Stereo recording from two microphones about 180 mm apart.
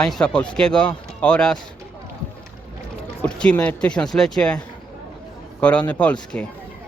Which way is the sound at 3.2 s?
5° left (ahead or behind).